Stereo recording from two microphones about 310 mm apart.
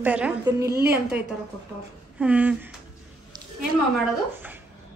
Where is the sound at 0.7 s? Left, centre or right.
Right.